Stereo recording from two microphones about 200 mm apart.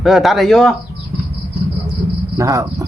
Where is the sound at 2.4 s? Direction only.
15° right (ahead or behind).